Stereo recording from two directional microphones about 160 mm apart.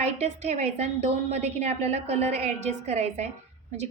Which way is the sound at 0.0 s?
45° right (ahead or behind).